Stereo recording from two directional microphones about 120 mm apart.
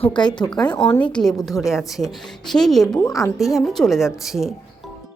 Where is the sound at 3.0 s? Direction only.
30° left (ahead or behind).